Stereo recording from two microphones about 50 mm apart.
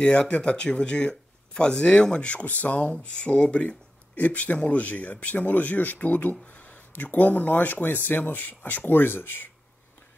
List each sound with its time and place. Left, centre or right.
0.0 s speech: left
2.4 s speech: left